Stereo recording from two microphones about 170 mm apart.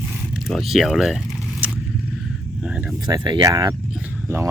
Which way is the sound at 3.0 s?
25° right (ahead or behind).